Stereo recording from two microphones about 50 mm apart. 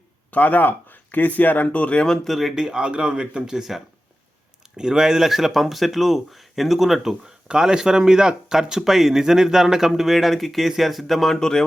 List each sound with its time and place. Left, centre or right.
0.3 s speech: left
2.2 s speech: centre
2.6 s speech: centre